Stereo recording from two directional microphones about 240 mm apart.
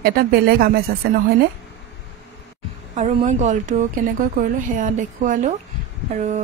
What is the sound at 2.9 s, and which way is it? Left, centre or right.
Speech, right.